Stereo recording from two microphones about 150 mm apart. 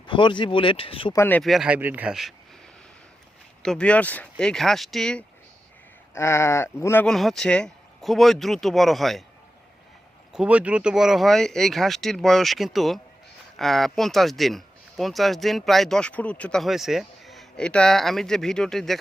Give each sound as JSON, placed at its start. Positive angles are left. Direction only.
{"t": 0.0, "sound": "speech", "side_deg": 30}
{"t": 1.1, "sound": "speech", "side_deg": 15}
{"t": 1.4, "sound": "speech", "side_deg": 0}
{"t": 3.6, "sound": "speech", "side_deg": 5}
{"t": 6.1, "sound": "speech", "side_deg": 20}
{"t": 7.1, "sound": "speech", "side_deg": 0}
{"t": 10.3, "sound": "speech", "side_deg": -10}